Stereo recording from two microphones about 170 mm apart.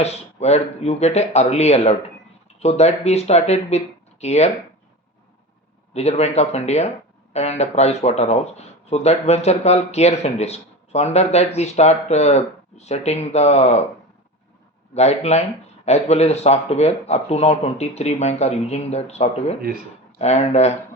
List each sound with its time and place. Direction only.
0.0 s speech: 40° left (ahead or behind)
5.9 s speech: 40° left (ahead or behind)
14.9 s speech: 40° left (ahead or behind)